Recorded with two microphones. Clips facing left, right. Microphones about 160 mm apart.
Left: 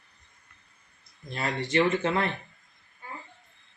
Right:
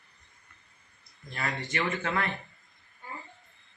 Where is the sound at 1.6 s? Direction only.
25° left (ahead or behind).